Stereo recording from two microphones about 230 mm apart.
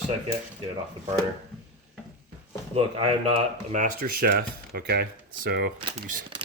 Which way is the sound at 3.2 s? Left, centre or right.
Right.